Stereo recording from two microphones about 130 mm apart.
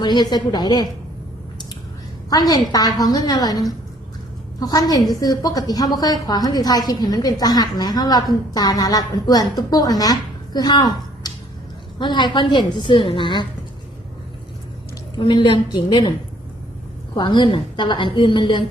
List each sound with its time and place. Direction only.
0.0 s a woman's voice: 35° left (ahead or behind)
2.5 s a woman's voice: 30° left (ahead or behind)
15.2 s a woman's voice: 40° left (ahead or behind)
17.2 s a woman's voice: 35° left (ahead or behind)